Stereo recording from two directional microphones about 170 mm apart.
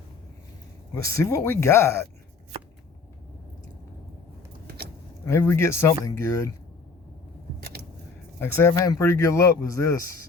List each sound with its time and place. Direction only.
1.0 s speech: 15° left (ahead or behind)
5.2 s speech: 15° left (ahead or behind)
8.4 s speech: 15° left (ahead or behind)